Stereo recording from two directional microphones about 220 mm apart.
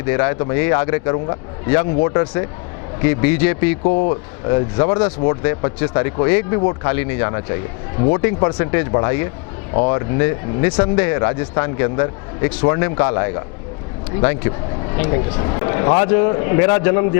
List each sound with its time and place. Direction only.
0.1 s speech: 20° left (ahead or behind)
3.0 s a man's voice: 15° left (ahead or behind)
3.8 s speech: 30° left (ahead or behind)
9.7 s speech: 30° left (ahead or behind)
10.2 s speech: 15° left (ahead or behind)